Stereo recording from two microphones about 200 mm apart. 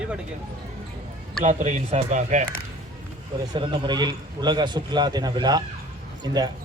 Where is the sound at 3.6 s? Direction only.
20° right (ahead or behind).